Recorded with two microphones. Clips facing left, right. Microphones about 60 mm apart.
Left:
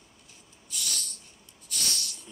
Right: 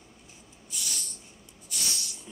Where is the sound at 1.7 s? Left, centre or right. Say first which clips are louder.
Left 1 dB; centre.